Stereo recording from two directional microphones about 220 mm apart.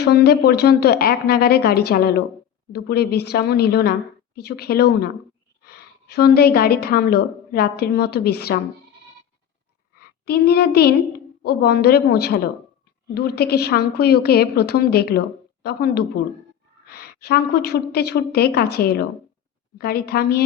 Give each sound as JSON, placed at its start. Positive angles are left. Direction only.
{"t": 0.0, "sound": "a woman's voice", "side_deg": 45}
{"t": 9.9, "sound": "a woman's voice", "side_deg": 45}